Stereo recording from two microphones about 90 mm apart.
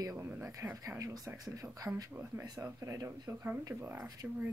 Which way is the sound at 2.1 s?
20° right (ahead or behind).